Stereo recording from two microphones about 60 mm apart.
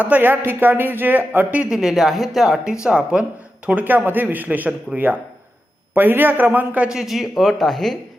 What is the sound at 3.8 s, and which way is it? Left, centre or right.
A man's voice, right.